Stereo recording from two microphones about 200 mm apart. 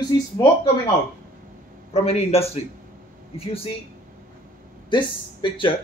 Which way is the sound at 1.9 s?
30° left (ahead or behind).